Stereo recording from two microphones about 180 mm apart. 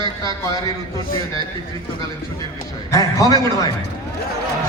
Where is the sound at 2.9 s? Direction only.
20° left (ahead or behind).